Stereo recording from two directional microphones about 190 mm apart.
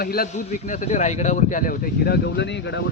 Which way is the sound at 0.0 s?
50° left (ahead or behind).